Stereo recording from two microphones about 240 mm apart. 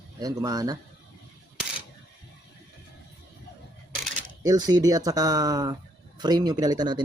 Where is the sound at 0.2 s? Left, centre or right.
Centre.